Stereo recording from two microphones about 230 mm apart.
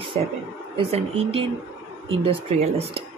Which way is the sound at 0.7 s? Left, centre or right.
Right.